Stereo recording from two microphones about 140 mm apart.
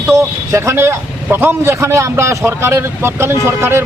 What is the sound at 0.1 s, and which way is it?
A man's voice, 20° right (ahead or behind).